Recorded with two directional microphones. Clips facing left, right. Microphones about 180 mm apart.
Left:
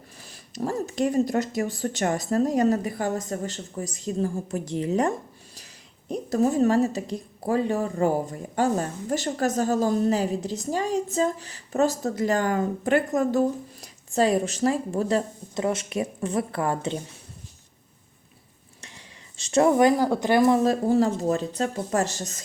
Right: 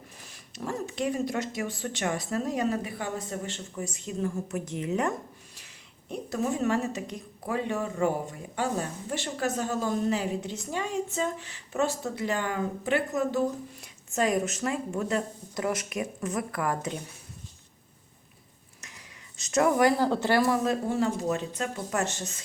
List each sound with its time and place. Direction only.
0.3 s a woman's voice: 40° left (ahead or behind)
13.8 s a woman's voice: 35° left (ahead or behind)
18.8 s speech: 30° left (ahead or behind)
20.7 s a woman's voice: 35° left (ahead or behind)